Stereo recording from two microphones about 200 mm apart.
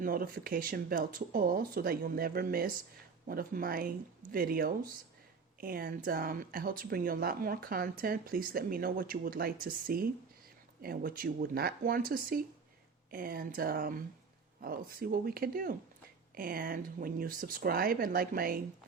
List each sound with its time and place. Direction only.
0.0 s speech: 45° right (ahead or behind)